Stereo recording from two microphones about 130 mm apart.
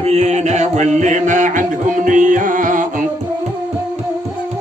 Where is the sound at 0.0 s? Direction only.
60° right (ahead or behind); by 2.9 s 90° right.